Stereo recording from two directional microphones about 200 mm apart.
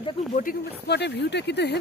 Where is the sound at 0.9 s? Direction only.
55° left (ahead or behind).